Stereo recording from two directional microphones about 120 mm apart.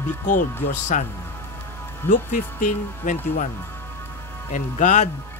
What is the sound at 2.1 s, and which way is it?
Speech, 90° left.